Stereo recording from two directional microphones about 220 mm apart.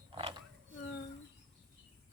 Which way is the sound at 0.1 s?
25° right (ahead or behind).